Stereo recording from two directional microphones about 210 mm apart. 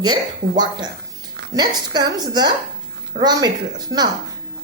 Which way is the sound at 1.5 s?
20° right (ahead or behind).